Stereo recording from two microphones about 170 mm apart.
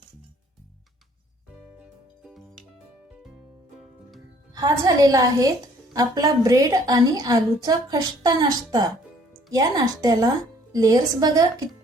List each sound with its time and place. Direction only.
1.8 s music: 5° right (ahead or behind)
4.5 s a woman's voice: 20° right (ahead or behind)